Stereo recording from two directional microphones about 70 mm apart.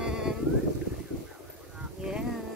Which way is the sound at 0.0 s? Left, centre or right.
Centre.